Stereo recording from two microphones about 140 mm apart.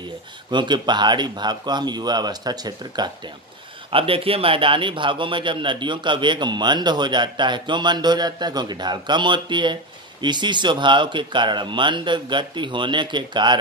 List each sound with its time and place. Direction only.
0.5 s a man's voice: 35° right (ahead or behind)
3.9 s a man's voice: 40° right (ahead or behind)